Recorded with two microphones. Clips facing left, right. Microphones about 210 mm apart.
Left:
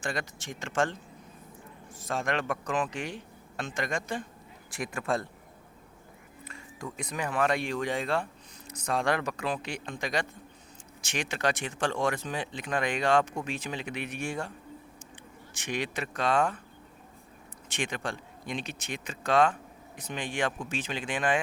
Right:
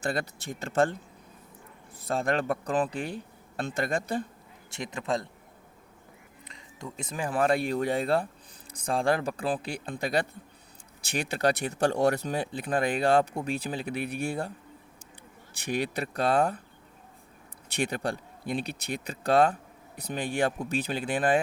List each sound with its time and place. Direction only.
0.1 s speech: 35° right (ahead or behind)
2.0 s speech: 35° right (ahead or behind)
4.7 s speech: 20° right (ahead or behind)
6.4 s speech: 20° right (ahead or behind); by 14.5 s 35° right (ahead or behind)
15.5 s speech: 35° right (ahead or behind)
17.7 s speech: 40° right (ahead or behind)